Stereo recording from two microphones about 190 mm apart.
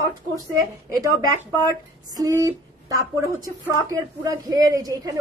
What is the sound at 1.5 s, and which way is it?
A woman's voice, 20° right (ahead or behind).